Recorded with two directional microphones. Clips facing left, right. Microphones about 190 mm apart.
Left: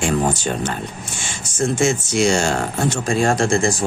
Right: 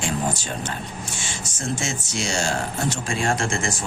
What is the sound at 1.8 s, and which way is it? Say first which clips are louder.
Speech: left 11 dB; 55° left (ahead or behind).